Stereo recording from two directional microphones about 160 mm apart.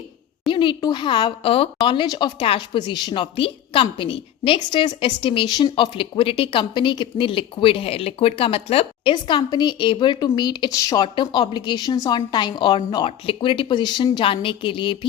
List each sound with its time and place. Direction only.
0.4 s a woman's voice: 30° left (ahead or behind)